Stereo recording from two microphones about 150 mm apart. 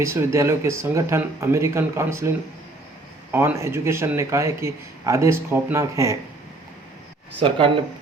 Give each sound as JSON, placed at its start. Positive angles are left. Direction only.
{"t": 0.0, "sound": "a man's voice", "side_deg": -20}
{"t": 3.3, "sound": "a man's voice", "side_deg": -15}
{"t": 7.3, "sound": "speech", "side_deg": -35}